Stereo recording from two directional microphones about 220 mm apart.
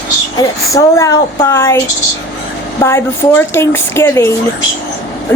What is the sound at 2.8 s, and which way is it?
A woman's voice, 10° left (ahead or behind).